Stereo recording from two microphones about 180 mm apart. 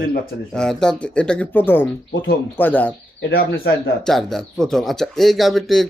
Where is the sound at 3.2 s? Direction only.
65° left (ahead or behind).